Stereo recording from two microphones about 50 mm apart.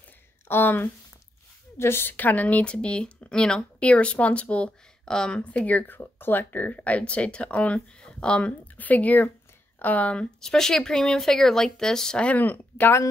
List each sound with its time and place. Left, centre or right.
0.5 s speech: left
8.7 s speech: left
10.4 s speech: centre
12.3 s speech: left